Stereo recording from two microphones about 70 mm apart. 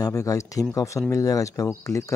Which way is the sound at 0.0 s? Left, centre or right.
Left.